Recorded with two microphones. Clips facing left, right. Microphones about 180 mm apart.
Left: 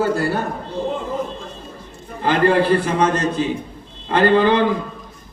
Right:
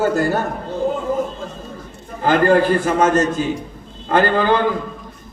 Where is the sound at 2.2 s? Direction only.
45° right (ahead or behind).